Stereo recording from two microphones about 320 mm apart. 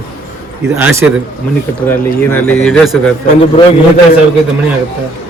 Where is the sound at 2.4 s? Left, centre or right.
Centre.